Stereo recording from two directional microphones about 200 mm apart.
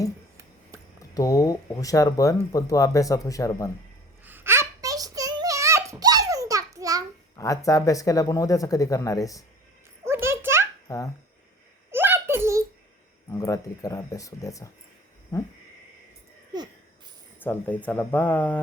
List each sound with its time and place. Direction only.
1.1 s speech: 15° left (ahead or behind)
4.2 s a sound: 10° right (ahead or behind)
7.3 s speech: 15° left (ahead or behind)
10.1 s a sound: 10° right (ahead or behind)
10.8 s speech: 15° left (ahead or behind)
11.9 s giggle: 10° right (ahead or behind)
13.3 s speech: 15° left (ahead or behind)
17.4 s speech: 10° left (ahead or behind)